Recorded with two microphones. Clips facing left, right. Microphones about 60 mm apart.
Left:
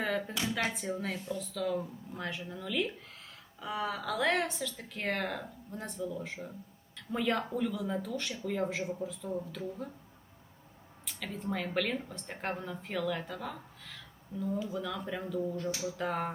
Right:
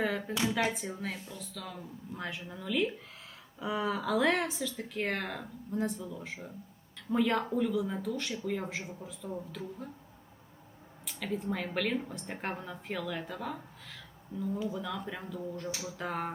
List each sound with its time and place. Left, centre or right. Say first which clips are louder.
0.0 s a sound: right 1 dB; centre
0.3 s speech: right 3 dB; centre
11.0 s speech: right 4 dB; centre